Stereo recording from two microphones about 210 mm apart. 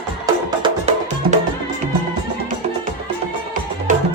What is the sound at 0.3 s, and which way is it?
Music, 25° right (ahead or behind).